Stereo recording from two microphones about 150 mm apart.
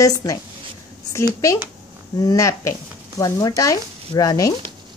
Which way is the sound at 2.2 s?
20° left (ahead or behind).